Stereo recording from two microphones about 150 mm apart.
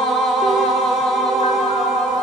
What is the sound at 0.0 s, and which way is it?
Music, centre (ahead or behind).